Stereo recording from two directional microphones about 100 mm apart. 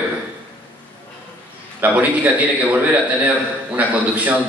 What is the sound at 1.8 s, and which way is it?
Speech, 15° right (ahead or behind).